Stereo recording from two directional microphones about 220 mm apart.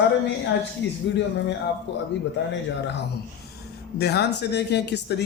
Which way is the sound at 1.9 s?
50° left (ahead or behind).